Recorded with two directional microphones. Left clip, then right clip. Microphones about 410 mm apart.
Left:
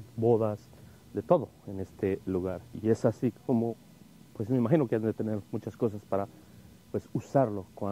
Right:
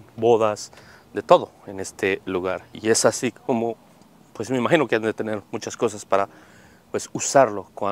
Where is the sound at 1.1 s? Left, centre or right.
Centre.